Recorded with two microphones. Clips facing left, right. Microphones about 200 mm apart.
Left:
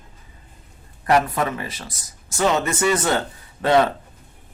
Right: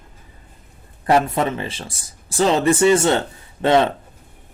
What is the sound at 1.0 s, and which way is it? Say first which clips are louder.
Speech: right 2 dB; 25° right (ahead or behind).